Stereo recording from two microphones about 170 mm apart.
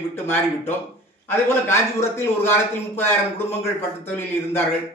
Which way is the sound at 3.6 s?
15° left (ahead or behind).